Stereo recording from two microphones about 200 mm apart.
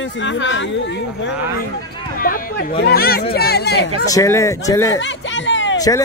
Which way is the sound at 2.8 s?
50° left (ahead or behind).